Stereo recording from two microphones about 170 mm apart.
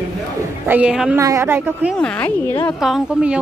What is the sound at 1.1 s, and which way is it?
Speech, 15° right (ahead or behind).